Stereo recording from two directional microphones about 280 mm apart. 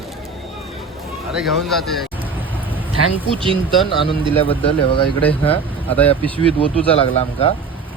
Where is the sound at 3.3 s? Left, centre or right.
Centre.